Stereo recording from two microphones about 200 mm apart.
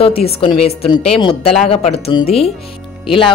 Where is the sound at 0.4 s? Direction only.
30° left (ahead or behind).